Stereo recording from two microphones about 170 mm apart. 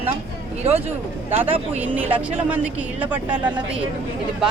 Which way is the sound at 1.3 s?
10° right (ahead or behind).